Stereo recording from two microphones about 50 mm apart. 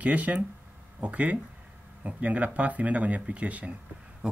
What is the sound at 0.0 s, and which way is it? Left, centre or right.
A man's voice, right.